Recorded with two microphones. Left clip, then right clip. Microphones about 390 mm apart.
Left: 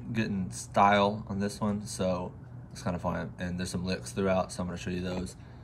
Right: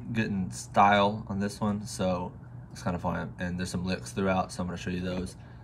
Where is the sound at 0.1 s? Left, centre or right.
Centre.